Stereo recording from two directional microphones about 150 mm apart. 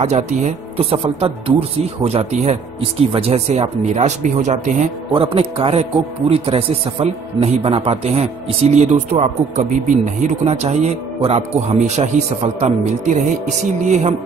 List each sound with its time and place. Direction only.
0.0 s speech: 50° right (ahead or behind)
5.1 s a man's voice: 40° right (ahead or behind)